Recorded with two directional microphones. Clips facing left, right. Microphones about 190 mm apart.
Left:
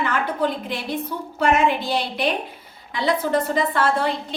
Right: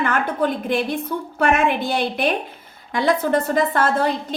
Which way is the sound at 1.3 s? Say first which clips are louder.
Even; 55° right (ahead or behind).